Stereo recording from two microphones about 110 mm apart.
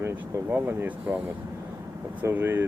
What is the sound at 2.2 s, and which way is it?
Speech, 20° right (ahead or behind).